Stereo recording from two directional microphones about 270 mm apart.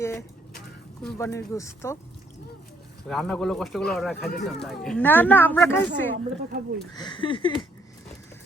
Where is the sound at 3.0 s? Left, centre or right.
Centre.